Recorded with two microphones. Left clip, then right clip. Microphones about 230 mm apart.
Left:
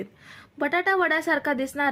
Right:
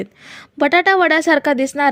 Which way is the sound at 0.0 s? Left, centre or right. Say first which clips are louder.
Right 9 dB; right.